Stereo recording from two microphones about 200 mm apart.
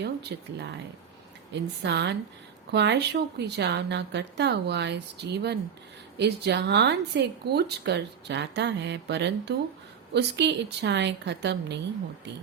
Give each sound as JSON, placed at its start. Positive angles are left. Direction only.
{"t": 0.0, "sound": "speech", "side_deg": -55}